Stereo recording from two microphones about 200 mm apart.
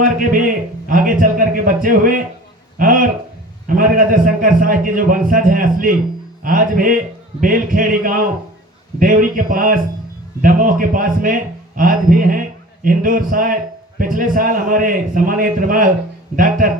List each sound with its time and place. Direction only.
0.3 s a man's voice: 45° right (ahead or behind)